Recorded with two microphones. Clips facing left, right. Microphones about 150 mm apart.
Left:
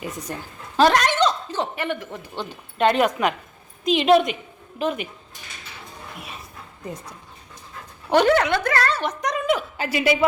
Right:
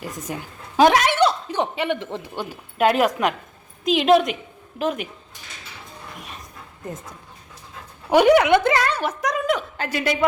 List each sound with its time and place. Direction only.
0.3 s a woman's voice: 10° right (ahead or behind)
0.8 s a sound: 10° right (ahead or behind)
2.0 s speech: 30° right (ahead or behind)
2.3 s speech: 10° right (ahead or behind)
6.1 s a sound: 5° left (ahead or behind)
8.1 s a woman's voice: 10° right (ahead or behind); by 10.2 s 10° left (ahead or behind)